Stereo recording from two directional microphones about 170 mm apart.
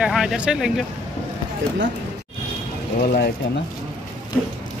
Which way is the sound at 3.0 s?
60° left (ahead or behind).